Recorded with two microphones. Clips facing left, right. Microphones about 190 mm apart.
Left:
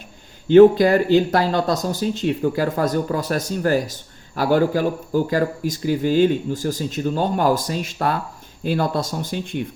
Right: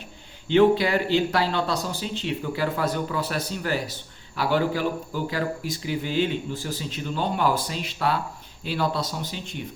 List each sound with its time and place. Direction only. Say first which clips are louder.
0.4 s speech: left 8 dB; 45° left (ahead or behind)